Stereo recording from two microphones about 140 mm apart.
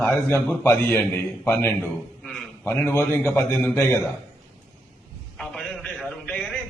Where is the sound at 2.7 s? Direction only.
15° left (ahead or behind).